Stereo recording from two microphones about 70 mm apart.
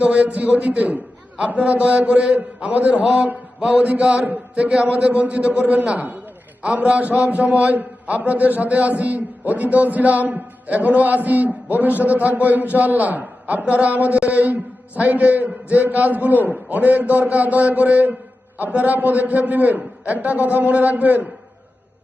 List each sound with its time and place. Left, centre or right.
0.0 s a man's voice: centre